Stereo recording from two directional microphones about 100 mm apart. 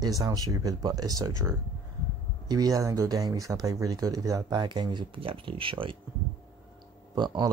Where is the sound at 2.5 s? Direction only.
40° right (ahead or behind); by 5.9 s 60° right (ahead or behind).